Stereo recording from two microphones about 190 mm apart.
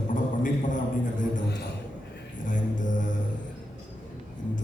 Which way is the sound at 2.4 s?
45° left (ahead or behind).